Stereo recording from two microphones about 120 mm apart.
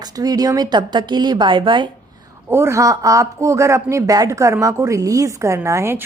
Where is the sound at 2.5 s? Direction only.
20° right (ahead or behind).